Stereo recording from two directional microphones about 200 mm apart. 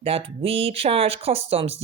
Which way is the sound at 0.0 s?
30° right (ahead or behind).